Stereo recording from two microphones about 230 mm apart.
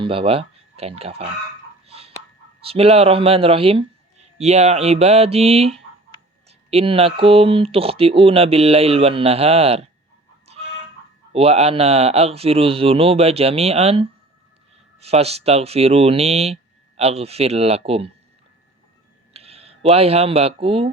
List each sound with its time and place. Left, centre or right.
0.0 s speech: right
1.9 s fowl: right
2.6 s speech: right
11.3 s speech: right
19.3 s speech: right